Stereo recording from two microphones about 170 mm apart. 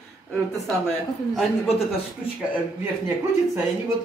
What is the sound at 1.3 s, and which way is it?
Speech, centre (ahead or behind).